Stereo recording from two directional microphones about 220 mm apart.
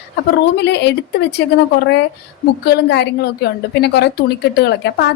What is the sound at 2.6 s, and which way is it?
A woman's voice, 50° left (ahead or behind).